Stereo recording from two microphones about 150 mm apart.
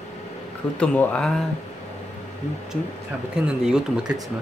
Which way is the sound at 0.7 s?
10° left (ahead or behind).